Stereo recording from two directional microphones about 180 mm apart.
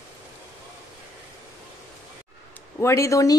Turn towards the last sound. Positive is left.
turn(degrees=15)  # may be behind; listen again after turning